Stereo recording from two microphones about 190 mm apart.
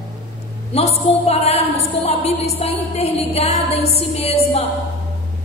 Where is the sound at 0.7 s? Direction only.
35° left (ahead or behind).